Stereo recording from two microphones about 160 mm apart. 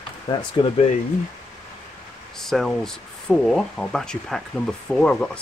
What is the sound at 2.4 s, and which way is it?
Speech, centre (ahead or behind).